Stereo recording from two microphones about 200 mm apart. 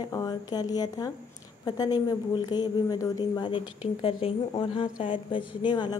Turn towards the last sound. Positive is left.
turn(degrees=20)  # may be behind; listen again after turning